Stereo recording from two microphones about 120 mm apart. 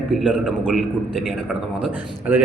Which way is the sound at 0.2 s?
5° right (ahead or behind).